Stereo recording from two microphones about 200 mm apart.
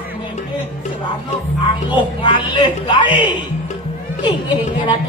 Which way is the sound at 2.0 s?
25° left (ahead or behind).